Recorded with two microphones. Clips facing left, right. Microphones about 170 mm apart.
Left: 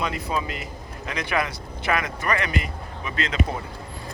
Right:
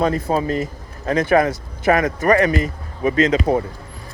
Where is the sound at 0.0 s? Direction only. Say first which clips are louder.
Right 8 dB; 45° right (ahead or behind).